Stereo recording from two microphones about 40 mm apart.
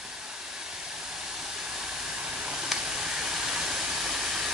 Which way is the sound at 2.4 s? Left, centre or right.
Right.